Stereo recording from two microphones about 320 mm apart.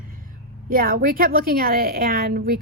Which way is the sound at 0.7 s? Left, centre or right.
Right.